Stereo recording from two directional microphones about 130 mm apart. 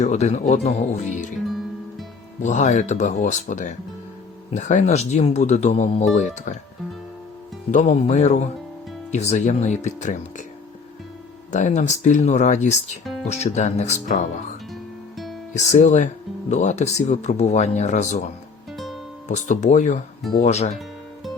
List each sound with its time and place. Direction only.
0.0 s speech: 60° left (ahead or behind)
2.4 s speech: 65° left (ahead or behind)
7.7 s speech: 65° left (ahead or behind)
11.5 s speech: 65° left (ahead or behind)
15.5 s speech: 65° left (ahead or behind)
19.3 s speech: 65° left (ahead or behind)